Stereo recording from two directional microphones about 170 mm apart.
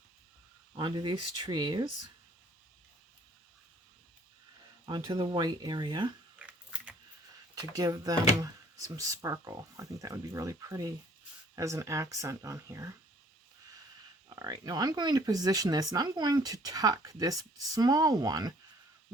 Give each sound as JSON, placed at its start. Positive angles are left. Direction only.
{"t": 0.8, "sound": "speech", "side_deg": -30}
{"t": 4.9, "sound": "speech", "side_deg": -25}
{"t": 6.4, "sound": "computer keyboard", "side_deg": -5}
{"t": 7.5, "sound": "speech", "side_deg": -20}
{"t": 14.3, "sound": "speech", "side_deg": -20}